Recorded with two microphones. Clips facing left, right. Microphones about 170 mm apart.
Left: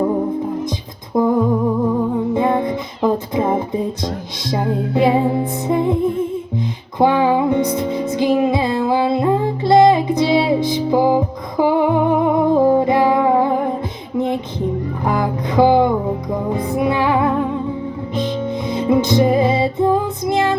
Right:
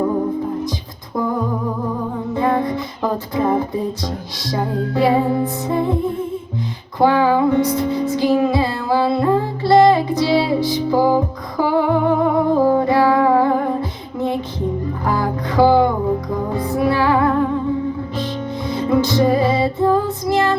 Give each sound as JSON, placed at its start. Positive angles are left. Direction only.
{"t": 1.1, "sound": "humming", "side_deg": 20}
{"t": 2.3, "sound": "music", "side_deg": 20}
{"t": 4.9, "sound": "music", "side_deg": 20}
{"t": 7.0, "sound": "music", "side_deg": 20}
{"t": 15.0, "sound": "music", "side_deg": 20}
{"t": 18.7, "sound": "music", "side_deg": 20}